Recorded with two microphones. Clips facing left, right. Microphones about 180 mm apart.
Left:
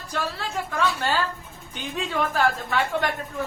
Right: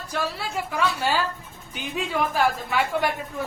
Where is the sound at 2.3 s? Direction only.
10° right (ahead or behind).